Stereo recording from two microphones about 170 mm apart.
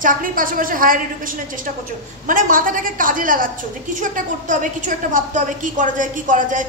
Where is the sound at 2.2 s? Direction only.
50° right (ahead or behind).